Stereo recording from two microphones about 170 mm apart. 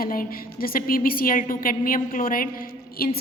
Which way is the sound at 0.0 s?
60° left (ahead or behind).